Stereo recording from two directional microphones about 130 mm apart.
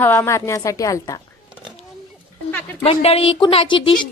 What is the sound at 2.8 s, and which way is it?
A woman's voice, 50° left (ahead or behind).